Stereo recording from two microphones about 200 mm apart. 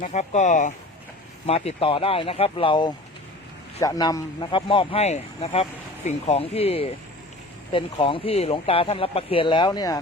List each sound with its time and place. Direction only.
0.0 s speech: 35° left (ahead or behind); by 10.0 s 20° left (ahead or behind)